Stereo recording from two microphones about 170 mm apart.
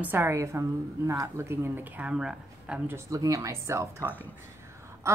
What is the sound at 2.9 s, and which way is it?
A woman's voice, 20° right (ahead or behind).